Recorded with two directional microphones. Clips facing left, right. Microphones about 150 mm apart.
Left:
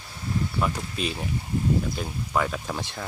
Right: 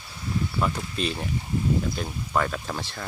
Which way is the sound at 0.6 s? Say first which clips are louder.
Right 2 dB; 5° left (ahead or behind).